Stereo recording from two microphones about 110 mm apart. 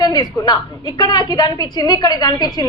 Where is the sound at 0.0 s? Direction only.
35° left (ahead or behind).